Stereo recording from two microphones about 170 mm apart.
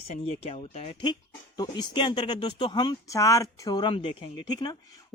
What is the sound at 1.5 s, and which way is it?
Speech, 25° left (ahead or behind).